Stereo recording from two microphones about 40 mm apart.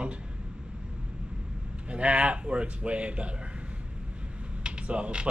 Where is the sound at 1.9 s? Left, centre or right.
Right.